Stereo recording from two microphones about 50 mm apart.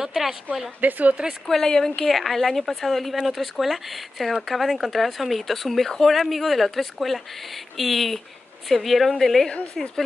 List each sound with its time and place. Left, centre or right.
0.0 s speech: centre
0.7 s a woman's voice: right
1.5 s speech: centre